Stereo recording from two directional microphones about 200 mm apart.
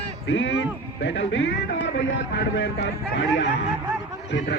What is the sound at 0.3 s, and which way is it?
A man's voice, 65° left (ahead or behind).